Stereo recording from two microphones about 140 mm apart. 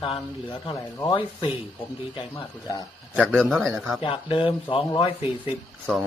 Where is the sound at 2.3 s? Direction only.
25° left (ahead or behind).